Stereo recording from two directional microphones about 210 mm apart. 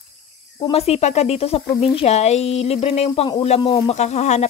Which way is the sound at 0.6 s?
30° left (ahead or behind).